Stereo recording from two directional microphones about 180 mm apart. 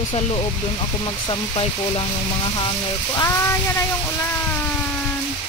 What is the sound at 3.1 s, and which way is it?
Speech, 15° left (ahead or behind).